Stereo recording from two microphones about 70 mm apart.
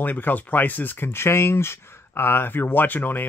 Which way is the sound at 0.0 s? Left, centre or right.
Left.